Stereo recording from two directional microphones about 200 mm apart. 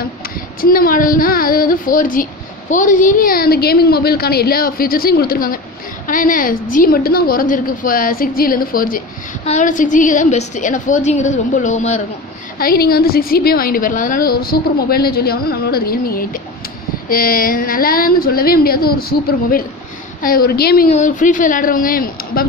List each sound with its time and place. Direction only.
0.6 s a woman's voice: 45° left (ahead or behind)
12.5 s a woman's voice: 50° left (ahead or behind)
20.9 s a woman's voice: 40° left (ahead or behind)